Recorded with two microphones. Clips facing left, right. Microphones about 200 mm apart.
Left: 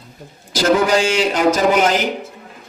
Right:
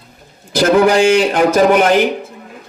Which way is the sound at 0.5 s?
55° right (ahead or behind).